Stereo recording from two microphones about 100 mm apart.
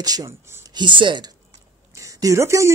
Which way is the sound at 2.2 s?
30° right (ahead or behind).